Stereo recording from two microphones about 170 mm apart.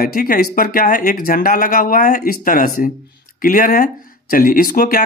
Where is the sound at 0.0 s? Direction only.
60° left (ahead or behind).